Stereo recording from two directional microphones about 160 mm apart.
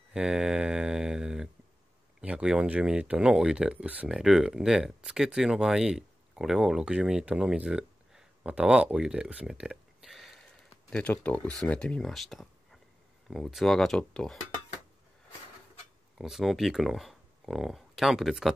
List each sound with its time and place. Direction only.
0.1 s mantra: 5° right (ahead or behind)
2.2 s speech: 5° right (ahead or behind)
16.2 s speech: centre (ahead or behind)